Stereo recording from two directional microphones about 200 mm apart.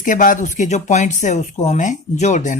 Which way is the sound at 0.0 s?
40° left (ahead or behind).